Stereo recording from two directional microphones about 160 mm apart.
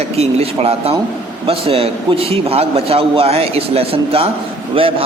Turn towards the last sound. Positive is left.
turn(degrees=-35)  # may be behind; listen again after turning